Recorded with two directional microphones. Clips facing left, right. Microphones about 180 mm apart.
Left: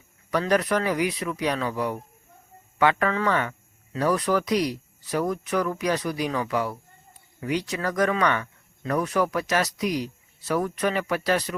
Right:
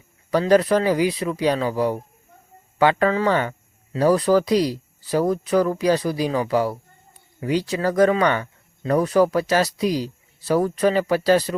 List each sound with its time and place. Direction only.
0.3 s speech: 30° right (ahead or behind)